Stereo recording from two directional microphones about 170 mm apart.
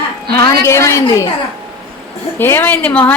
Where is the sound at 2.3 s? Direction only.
10° left (ahead or behind).